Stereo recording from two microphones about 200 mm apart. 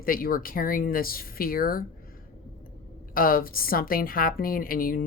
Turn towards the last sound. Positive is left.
turn(degrees=45)  # may be behind; listen again after turning